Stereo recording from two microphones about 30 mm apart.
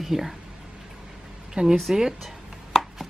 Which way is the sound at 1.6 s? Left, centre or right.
Right.